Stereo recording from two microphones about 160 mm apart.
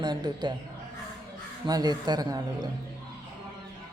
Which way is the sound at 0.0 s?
25° right (ahead or behind).